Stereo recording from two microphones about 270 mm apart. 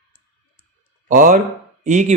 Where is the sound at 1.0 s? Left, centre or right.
Right.